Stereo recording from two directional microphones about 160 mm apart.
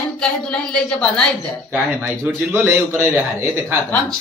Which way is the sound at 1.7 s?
10° right (ahead or behind).